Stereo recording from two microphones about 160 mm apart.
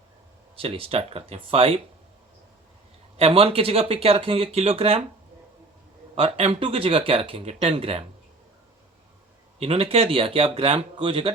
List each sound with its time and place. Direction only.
0.5 s speech: 35° right (ahead or behind)
3.2 s speech: 35° right (ahead or behind)
6.1 s speech: 40° right (ahead or behind)
9.6 s speech: 35° right (ahead or behind)